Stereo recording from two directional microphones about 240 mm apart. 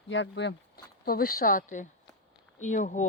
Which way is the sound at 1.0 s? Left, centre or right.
Left.